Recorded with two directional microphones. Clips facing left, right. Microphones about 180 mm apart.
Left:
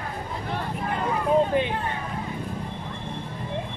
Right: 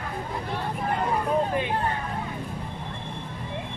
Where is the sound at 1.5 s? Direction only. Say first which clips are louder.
Left 4 dB; 25° left (ahead or behind).